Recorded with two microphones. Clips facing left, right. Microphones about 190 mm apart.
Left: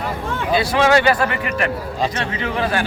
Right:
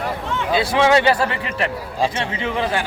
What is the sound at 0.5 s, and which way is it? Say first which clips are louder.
A man's voice: even; 20° right (ahead or behind).